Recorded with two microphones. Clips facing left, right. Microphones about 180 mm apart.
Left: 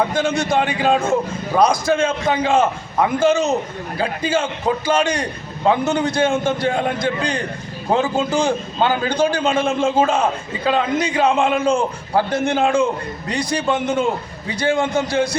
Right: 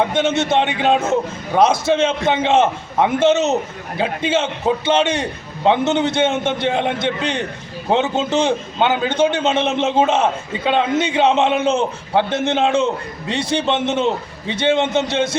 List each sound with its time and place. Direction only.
0.0 s a man's voice: 25° right (ahead or behind)